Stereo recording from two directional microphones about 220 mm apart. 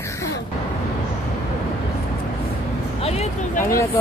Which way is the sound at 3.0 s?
30° left (ahead or behind).